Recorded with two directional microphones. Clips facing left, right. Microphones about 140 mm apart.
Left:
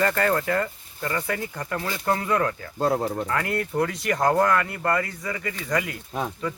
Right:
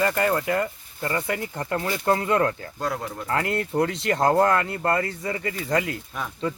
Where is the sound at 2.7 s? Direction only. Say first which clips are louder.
Left 6 dB; 30° left (ahead or behind).